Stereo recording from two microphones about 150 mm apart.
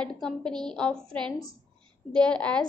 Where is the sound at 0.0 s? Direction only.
5° left (ahead or behind).